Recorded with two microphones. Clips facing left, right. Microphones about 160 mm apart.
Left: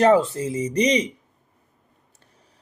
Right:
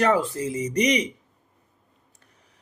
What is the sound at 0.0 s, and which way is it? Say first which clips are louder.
Speech: left 5 dB; 30° left (ahead or behind).